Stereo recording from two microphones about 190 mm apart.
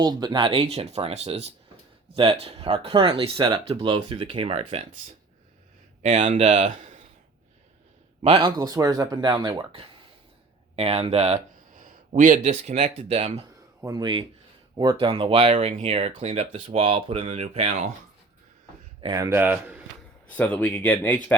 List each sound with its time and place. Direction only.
0.0 s speech: 20° right (ahead or behind)
6.0 s speech: 40° right (ahead or behind)
8.2 s speech: 30° right (ahead or behind)
11.8 s a sound: 45° right (ahead or behind)
12.4 s speech: 35° right (ahead or behind)
13.8 s speech: 20° right (ahead or behind); by 17.9 s 35° right (ahead or behind)
19.0 s speech: 15° right (ahead or behind)
20.3 s speech: 10° left (ahead or behind)